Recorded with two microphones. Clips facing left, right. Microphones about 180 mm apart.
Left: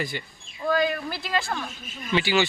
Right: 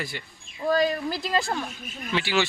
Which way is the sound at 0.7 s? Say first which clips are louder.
Right 1 dB; 35° right (ahead or behind).